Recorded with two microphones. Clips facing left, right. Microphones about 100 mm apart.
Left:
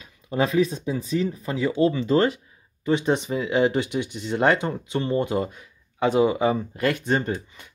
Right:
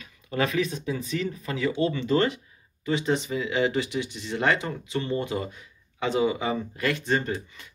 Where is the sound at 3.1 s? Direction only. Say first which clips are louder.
Left 3 dB; 20° left (ahead or behind).